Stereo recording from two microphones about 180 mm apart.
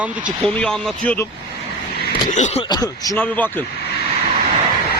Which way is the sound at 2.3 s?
40° left (ahead or behind).